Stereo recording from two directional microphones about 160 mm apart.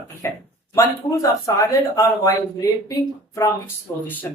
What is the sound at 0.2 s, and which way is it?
Speech, 15° left (ahead or behind).